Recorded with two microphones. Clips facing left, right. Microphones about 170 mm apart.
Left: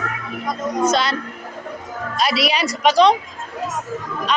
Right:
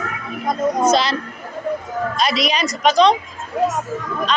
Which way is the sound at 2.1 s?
5° left (ahead or behind).